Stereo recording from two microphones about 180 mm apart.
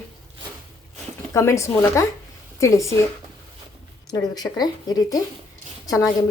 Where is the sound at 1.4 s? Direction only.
15° left (ahead or behind).